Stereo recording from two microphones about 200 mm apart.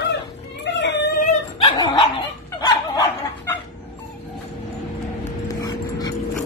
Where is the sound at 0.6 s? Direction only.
60° left (ahead or behind).